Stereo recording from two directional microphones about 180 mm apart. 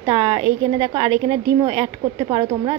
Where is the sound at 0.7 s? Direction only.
35° right (ahead or behind).